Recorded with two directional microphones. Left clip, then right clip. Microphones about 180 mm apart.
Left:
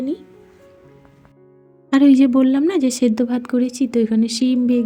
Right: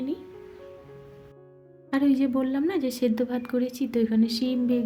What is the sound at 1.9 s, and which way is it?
A woman's voice, 45° left (ahead or behind).